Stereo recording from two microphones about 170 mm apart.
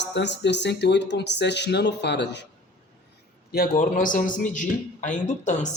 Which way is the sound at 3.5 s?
60° left (ahead or behind).